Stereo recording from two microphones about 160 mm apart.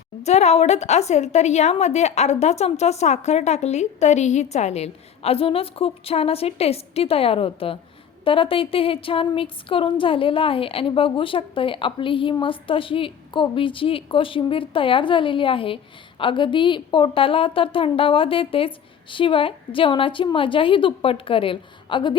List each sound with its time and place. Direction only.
0.3 s a woman's voice: 45° left (ahead or behind)